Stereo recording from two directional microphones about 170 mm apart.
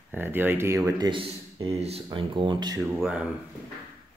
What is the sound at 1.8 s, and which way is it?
Speech, 35° right (ahead or behind).